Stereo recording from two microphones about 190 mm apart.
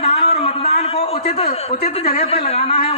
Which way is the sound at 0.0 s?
30° left (ahead or behind).